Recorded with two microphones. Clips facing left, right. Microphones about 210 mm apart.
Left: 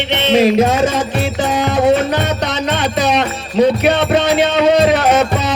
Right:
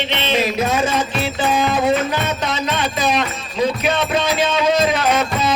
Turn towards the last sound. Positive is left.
turn(degrees=65)  # may be behind; listen again after turning